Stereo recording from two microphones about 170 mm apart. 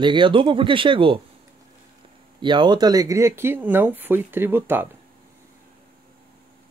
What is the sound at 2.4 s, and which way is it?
Speech, 25° right (ahead or behind).